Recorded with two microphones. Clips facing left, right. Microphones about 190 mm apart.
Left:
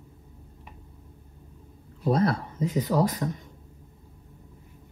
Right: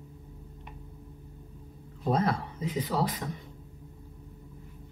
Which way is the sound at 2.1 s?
40° left (ahead or behind).